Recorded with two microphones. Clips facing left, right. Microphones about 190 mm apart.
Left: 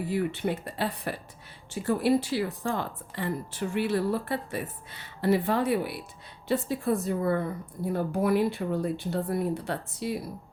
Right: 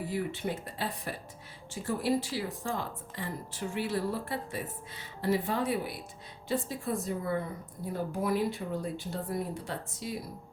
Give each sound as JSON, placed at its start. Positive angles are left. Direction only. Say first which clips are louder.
{"t": 0.1, "sound": "speech", "louder": "left 6 dB", "side_deg": 65}